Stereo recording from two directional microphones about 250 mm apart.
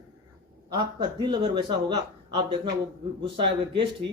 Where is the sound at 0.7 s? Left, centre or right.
Centre.